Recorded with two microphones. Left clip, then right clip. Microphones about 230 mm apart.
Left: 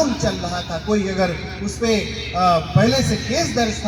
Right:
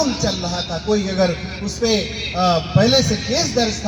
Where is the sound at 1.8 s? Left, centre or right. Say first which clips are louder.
Right 1 dB; right.